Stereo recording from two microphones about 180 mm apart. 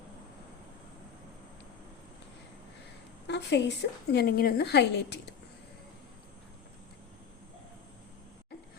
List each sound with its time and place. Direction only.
3.2 s a woman's voice: 70° left (ahead or behind)